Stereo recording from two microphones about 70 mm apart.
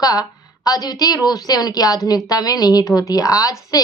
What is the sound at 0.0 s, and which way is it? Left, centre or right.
A woman's voice, left.